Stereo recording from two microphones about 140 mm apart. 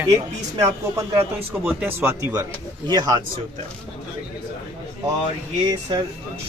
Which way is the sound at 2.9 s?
30° right (ahead or behind).